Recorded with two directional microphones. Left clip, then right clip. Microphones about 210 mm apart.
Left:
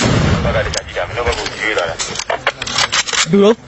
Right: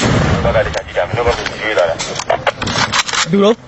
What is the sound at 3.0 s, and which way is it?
Single-lens reflex camera, 45° left (ahead or behind).